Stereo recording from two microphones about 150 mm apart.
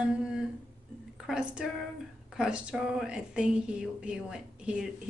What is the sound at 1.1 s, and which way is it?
A woman's voice, 5° right (ahead or behind).